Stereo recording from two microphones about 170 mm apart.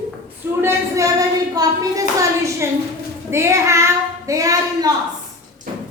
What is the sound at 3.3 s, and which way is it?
Child singing, 15° right (ahead or behind).